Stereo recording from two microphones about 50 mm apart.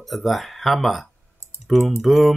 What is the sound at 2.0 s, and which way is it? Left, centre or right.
Speech, centre.